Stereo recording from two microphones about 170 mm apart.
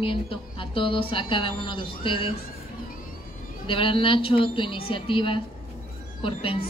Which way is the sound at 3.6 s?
30° left (ahead or behind).